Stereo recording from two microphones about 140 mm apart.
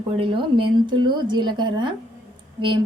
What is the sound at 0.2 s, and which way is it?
A woman's voice, 35° right (ahead or behind).